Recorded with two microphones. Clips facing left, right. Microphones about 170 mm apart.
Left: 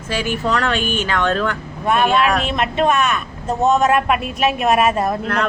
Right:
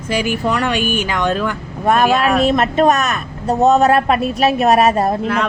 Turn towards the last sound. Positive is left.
turn(degrees=-35)  # may be behind; listen again after turning